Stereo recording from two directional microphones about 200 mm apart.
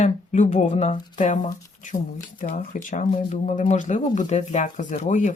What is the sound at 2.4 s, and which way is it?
Speech, 40° left (ahead or behind).